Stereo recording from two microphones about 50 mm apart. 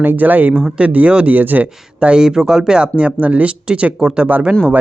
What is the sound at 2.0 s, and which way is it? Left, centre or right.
Speech, centre.